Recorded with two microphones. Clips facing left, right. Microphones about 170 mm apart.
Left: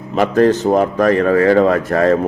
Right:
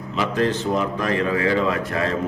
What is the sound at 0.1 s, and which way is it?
A man's voice, 50° left (ahead or behind).